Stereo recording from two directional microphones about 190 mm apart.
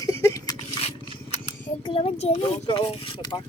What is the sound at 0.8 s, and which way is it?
Scissors, 35° left (ahead or behind).